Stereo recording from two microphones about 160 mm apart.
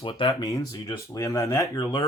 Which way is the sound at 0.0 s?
30° left (ahead or behind).